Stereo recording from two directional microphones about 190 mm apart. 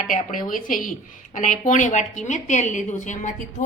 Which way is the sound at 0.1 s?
45° left (ahead or behind).